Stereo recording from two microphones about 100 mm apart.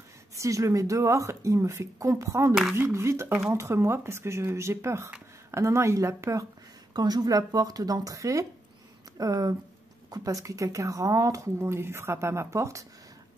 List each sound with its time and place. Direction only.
0.4 s speech: 30° right (ahead or behind)
6.9 s speech: 45° right (ahead or behind)